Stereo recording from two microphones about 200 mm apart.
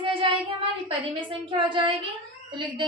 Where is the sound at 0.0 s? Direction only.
25° right (ahead or behind).